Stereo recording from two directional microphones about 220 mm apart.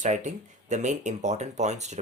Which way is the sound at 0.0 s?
35° right (ahead or behind).